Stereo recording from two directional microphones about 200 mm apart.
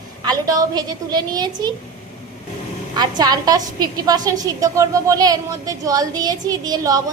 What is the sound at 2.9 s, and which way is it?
A woman's voice, 20° right (ahead or behind).